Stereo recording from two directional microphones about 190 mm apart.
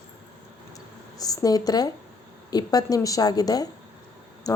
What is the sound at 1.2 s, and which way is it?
Speech, 20° left (ahead or behind).